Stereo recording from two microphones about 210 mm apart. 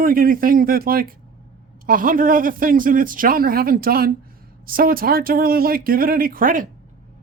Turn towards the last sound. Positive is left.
turn(degrees=-40)  # may be behind; listen again after turning